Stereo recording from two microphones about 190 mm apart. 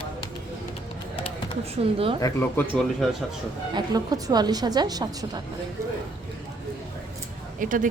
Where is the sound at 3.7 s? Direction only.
20° right (ahead or behind).